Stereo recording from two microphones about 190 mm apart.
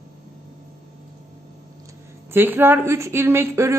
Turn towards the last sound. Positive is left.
turn(degrees=-15)  # may be behind; listen again after turning